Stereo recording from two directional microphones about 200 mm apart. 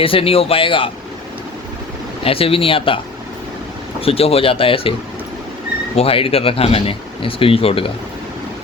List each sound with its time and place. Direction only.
0.0 s speech: 25° left (ahead or behind)
2.2 s speech: 30° left (ahead or behind)
4.0 s speech: 30° left (ahead or behind)
6.0 s speech: 30° left (ahead or behind)